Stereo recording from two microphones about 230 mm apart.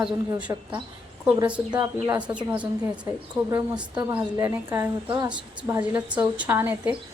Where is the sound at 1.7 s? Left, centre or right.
Centre.